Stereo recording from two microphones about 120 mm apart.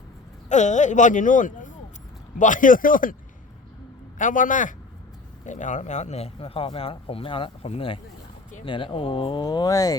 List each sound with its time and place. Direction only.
0.4 s a man's voice: 85° left
4.2 s a man's voice: 90° left; by 9.4 s 45° left (ahead or behind)
9.4 s speech: 35° left (ahead or behind)